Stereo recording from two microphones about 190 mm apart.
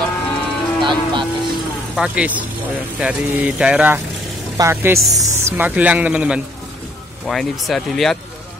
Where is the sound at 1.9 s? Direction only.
5° right (ahead or behind).